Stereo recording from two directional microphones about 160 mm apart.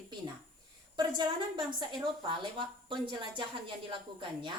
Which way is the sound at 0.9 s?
30° right (ahead or behind).